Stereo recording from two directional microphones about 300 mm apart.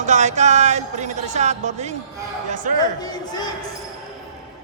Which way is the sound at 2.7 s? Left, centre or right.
Centre.